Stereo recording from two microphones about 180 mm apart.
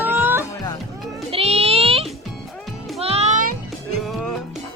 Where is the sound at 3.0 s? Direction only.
35° right (ahead or behind).